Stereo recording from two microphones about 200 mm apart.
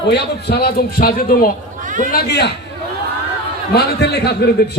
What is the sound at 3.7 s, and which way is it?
Speech, 55° left (ahead or behind).